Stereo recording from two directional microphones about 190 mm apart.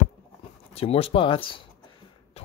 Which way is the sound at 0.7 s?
30° left (ahead or behind).